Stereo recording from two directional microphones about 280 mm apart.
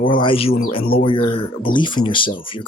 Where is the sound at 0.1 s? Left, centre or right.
Centre.